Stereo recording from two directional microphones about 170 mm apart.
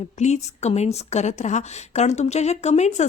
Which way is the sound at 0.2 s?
40° left (ahead or behind).